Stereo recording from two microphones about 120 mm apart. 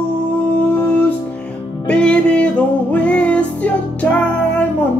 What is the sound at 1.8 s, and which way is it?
Music, 10° left (ahead or behind).